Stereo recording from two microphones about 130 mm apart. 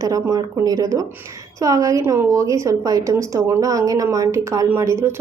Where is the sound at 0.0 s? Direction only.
25° right (ahead or behind).